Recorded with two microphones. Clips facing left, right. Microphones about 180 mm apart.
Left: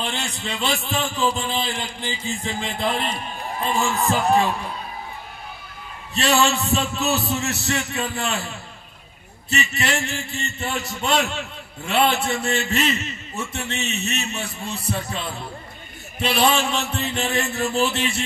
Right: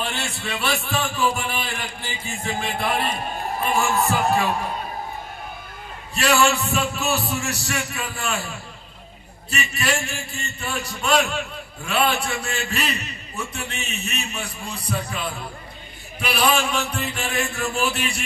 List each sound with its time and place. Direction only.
0.0 s a man's voice: 20° left (ahead or behind)
6.1 s a man's voice: 20° left (ahead or behind)
9.5 s a man's voice: 20° left (ahead or behind)